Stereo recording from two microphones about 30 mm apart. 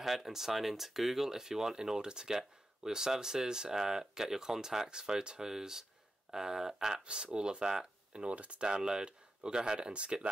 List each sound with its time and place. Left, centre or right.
0.0 s speech: centre; by 5.4 s right
5.4 s speech: centre
7.3 s speech: right
7.6 s a sound: right
8.2 s speech: right
8.6 s speech: right
9.9 s speech: right